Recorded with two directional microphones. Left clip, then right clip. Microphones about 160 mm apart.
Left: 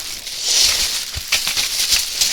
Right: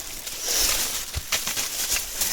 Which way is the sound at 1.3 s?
5° left (ahead or behind).